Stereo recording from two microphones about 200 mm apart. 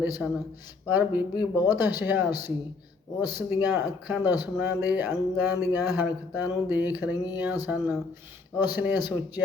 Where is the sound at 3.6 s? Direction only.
10° right (ahead or behind).